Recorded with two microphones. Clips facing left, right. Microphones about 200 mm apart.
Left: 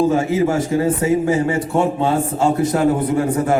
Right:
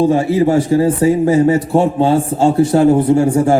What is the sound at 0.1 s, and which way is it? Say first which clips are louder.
A man's voice: right 4 dB; 35° right (ahead or behind).